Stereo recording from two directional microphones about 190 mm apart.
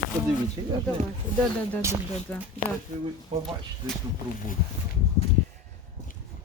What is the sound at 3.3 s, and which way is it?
Speech, 25° right (ahead or behind).